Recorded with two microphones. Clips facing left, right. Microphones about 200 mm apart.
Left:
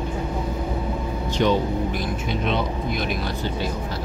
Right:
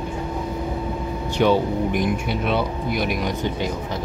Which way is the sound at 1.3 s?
10° right (ahead or behind).